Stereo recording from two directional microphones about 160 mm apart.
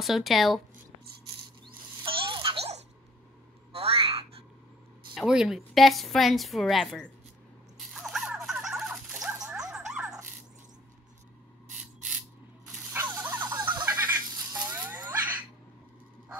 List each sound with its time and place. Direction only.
0.0 s a woman's voice: centre (ahead or behind)
2.0 s a sound: 30° right (ahead or behind)
5.1 s a woman's voice: centre (ahead or behind)
7.8 s dog: centre (ahead or behind)
12.9 s dog: 15° right (ahead or behind)
14.5 s snake: 25° right (ahead or behind)